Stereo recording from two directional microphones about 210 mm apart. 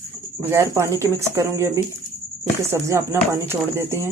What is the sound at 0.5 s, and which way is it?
Speech, 15° right (ahead or behind).